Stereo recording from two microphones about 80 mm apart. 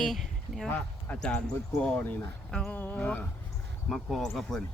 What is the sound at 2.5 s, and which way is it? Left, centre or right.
Speech, centre.